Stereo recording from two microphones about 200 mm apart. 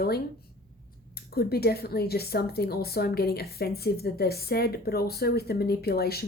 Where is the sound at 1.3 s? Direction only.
50° left (ahead or behind).